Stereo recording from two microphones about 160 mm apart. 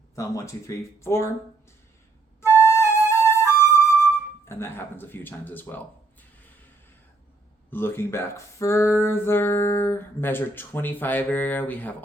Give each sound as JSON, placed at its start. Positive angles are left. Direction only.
{"t": 0.2, "sound": "speech", "side_deg": 20}
{"t": 2.4, "sound": "flute", "side_deg": 15}
{"t": 4.1, "sound": "speech", "side_deg": 15}
{"t": 7.7, "sound": "speech", "side_deg": 15}